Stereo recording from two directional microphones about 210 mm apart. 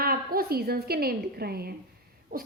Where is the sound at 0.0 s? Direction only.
45° right (ahead or behind).